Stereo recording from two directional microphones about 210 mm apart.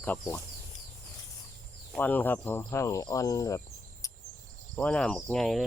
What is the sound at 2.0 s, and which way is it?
Speech, 10° left (ahead or behind).